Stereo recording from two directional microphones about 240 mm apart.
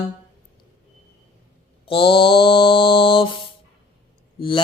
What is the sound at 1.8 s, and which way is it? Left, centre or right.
Mantra, left.